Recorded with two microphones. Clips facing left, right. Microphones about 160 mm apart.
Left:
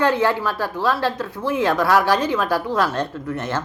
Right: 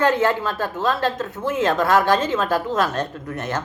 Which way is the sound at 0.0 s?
20° right (ahead or behind).